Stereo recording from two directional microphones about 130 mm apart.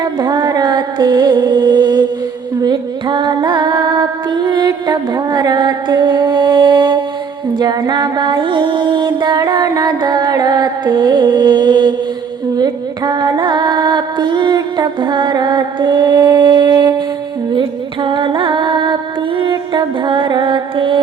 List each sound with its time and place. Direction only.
0.0 s music: 30° right (ahead or behind)
2.6 s female singing: 35° right (ahead or behind)
7.6 s music: 30° right (ahead or behind)